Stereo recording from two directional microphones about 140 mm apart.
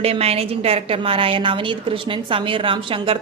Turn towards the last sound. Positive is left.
turn(degrees=-40)  # may be behind; listen again after turning